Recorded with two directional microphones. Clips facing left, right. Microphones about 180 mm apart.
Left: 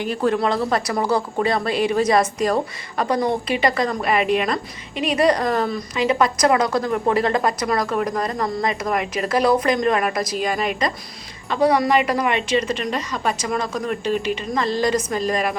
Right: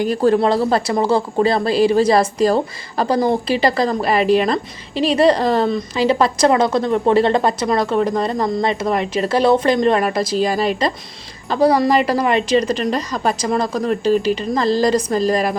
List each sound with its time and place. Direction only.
0.0 s a woman's voice: 35° right (ahead or behind)